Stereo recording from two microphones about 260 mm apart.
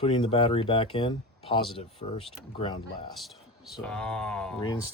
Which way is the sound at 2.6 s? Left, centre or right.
Centre.